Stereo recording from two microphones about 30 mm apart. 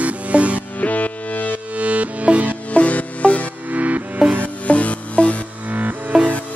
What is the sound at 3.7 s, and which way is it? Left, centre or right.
Music, right.